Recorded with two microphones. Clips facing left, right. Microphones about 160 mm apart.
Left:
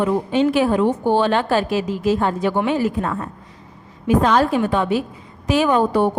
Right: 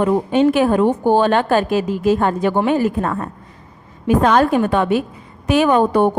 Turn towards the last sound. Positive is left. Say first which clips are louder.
# right 3 dB
turn(degrees=-55)  # may be behind; listen again after turning